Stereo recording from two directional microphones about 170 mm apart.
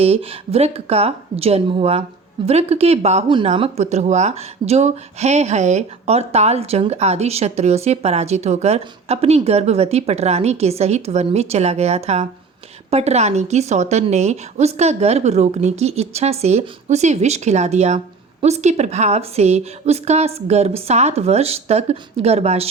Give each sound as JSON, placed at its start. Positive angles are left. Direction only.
{"t": 0.0, "sound": "speech", "side_deg": -35}